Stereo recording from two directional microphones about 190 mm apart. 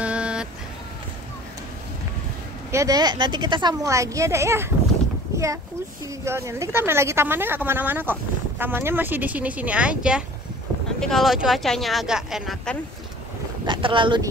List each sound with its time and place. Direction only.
0.0 s vehicle: 5° right (ahead or behind)
2.7 s speech: 20° right (ahead or behind)
5.3 s a sound: 15° right (ahead or behind)
6.2 s speech: 15° right (ahead or behind)
13.7 s speech: 25° right (ahead or behind)